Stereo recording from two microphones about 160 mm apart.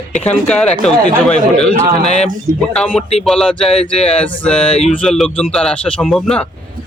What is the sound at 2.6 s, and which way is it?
Speech, 5° left (ahead or behind).